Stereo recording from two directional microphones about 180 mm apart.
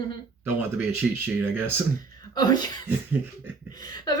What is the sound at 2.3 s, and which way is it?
Speech, 25° left (ahead or behind).